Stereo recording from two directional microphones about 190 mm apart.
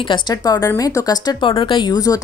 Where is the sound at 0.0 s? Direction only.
25° left (ahead or behind).